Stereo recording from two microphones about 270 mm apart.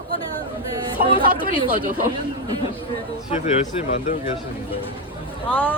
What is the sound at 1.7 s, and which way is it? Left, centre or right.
Speech, right.